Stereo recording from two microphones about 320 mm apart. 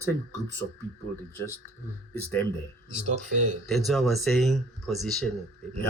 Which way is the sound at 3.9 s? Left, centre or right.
Centre.